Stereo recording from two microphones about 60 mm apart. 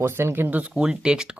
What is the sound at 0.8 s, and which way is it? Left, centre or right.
Speech, centre.